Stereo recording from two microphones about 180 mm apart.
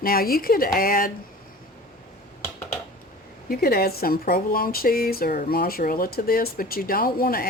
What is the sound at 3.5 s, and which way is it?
Speech, 60° left (ahead or behind).